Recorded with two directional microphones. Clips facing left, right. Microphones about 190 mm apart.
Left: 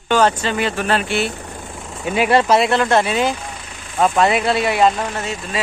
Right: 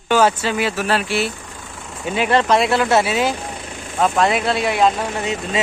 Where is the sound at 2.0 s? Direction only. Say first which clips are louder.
Left 2 dB; 10° left (ahead or behind).